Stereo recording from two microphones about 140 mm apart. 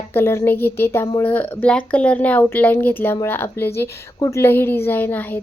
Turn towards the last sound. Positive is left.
turn(degrees=15)  # may be behind; listen again after turning